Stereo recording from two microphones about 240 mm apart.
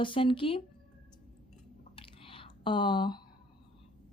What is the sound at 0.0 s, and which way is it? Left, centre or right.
Speech, left.